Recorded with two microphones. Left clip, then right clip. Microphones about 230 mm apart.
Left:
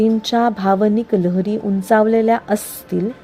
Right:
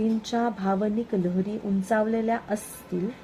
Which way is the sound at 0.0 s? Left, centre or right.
Left.